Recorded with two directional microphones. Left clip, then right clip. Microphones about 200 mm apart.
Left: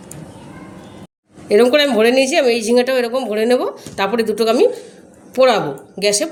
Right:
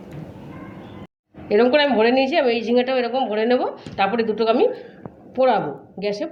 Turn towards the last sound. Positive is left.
turn(degrees=60)  # may be behind; listen again after turning